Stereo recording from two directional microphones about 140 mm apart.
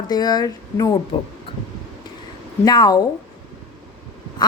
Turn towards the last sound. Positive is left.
turn(degrees=30)  # may be behind; listen again after turning